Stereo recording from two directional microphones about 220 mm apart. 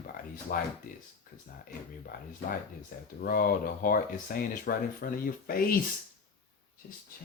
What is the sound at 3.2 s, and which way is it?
Speech, 40° left (ahead or behind).